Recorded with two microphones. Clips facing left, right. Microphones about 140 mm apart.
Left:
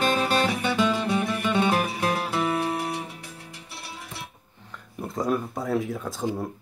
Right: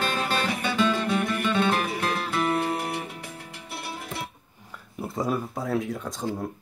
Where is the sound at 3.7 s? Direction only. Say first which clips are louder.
Right 6 dB; 60° right (ahead or behind).